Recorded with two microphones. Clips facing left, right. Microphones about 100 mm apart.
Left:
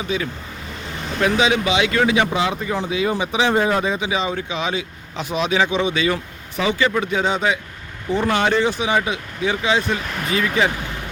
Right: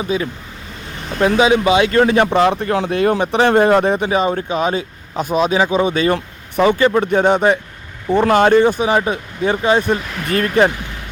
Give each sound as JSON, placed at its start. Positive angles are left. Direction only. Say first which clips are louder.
{"t": 1.2, "sound": "speech", "louder": "right 5 dB", "side_deg": -35}